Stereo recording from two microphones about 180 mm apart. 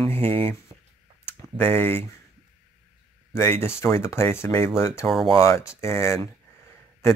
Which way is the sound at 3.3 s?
15° left (ahead or behind).